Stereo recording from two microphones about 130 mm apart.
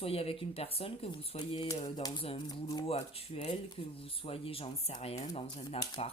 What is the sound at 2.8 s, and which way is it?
Speech, 50° left (ahead or behind).